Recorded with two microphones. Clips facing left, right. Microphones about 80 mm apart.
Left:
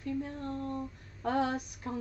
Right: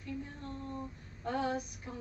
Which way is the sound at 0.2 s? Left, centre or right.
Left.